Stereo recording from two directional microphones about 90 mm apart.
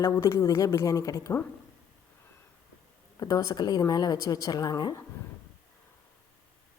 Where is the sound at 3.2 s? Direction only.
40° left (ahead or behind).